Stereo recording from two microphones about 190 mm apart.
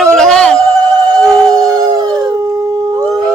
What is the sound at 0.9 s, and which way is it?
Howl, 20° right (ahead or behind).